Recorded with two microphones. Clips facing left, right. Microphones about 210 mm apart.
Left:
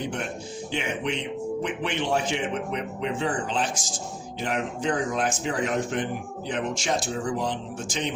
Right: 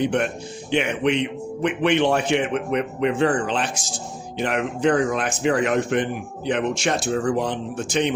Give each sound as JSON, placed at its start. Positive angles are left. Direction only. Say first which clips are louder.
{"t": 0.0, "sound": "a man's voice", "louder": "right 9 dB", "side_deg": -70}